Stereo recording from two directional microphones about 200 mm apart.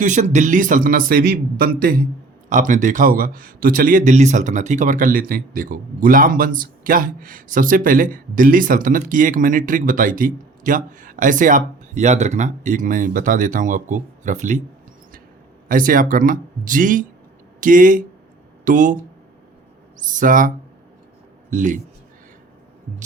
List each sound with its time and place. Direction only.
0.0 s a man's voice: 35° right (ahead or behind)
15.7 s a man's voice: 45° right (ahead or behind)
20.0 s a man's voice: 40° right (ahead or behind)
21.5 s a man's voice: 40° right (ahead or behind)